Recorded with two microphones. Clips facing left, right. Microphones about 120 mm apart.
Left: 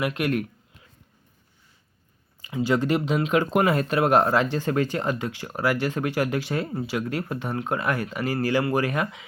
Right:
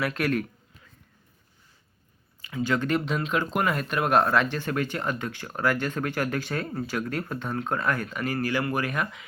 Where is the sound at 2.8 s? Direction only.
15° left (ahead or behind).